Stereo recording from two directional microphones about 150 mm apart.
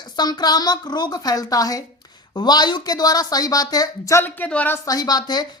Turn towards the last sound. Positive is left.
turn(degrees=25)  # may be behind; listen again after turning